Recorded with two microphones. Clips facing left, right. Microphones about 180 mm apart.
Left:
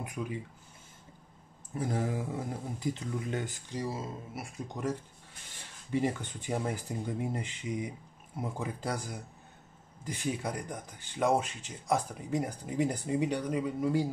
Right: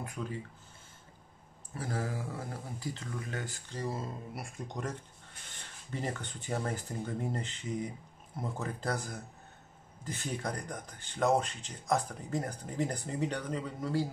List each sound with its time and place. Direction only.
0.0 s speech: 15° left (ahead or behind)
1.8 s speech: 20° left (ahead or behind)